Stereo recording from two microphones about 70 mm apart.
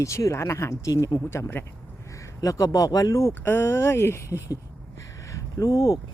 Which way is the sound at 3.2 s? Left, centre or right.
Left.